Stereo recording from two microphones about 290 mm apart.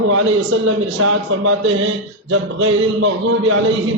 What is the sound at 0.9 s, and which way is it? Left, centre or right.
A man's voice, right.